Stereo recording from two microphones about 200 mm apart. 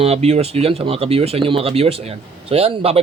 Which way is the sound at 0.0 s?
30° right (ahead or behind).